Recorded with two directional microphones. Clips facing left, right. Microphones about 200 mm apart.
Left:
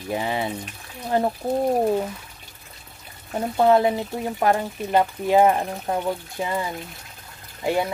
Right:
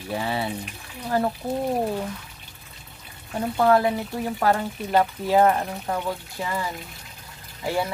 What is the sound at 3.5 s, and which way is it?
Speech, 20° left (ahead or behind).